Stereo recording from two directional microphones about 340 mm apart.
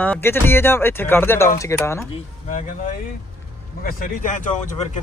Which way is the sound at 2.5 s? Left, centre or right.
Left.